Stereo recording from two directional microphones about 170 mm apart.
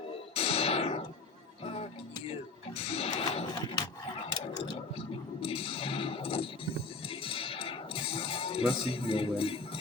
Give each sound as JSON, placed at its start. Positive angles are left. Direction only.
{"t": 0.3, "sound": "music", "side_deg": 35}